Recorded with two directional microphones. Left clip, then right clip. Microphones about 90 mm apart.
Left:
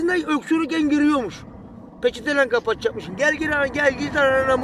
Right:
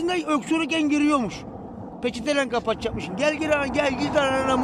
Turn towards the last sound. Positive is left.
turn(degrees=-15)  # may be behind; listen again after turning